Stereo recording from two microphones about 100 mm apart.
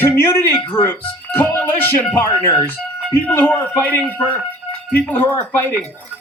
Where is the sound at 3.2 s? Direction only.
15° left (ahead or behind).